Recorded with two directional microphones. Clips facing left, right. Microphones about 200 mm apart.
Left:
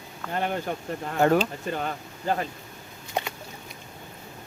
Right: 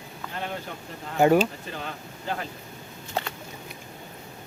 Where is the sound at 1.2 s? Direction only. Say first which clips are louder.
Right 2 dB; 10° right (ahead or behind).